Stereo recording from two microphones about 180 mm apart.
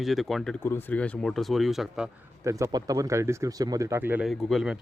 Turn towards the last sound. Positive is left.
turn(degrees=0)  # may be behind; listen again after turning